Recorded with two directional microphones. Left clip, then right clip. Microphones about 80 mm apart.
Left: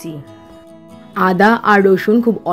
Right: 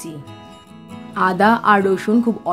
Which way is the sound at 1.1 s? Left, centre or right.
Left.